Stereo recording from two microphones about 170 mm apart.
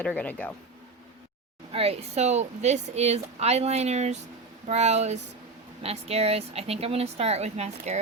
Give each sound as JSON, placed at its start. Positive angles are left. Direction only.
{"t": 0.0, "sound": "speech", "side_deg": 10}
{"t": 1.7, "sound": "a woman's voice", "side_deg": -35}